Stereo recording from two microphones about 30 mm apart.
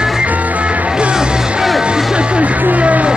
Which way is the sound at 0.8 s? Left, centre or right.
Right.